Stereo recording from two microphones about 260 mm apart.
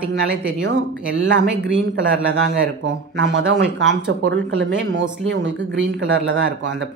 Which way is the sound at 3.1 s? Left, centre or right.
Right.